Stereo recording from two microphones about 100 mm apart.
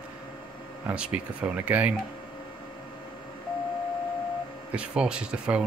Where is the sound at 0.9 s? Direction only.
10° right (ahead or behind).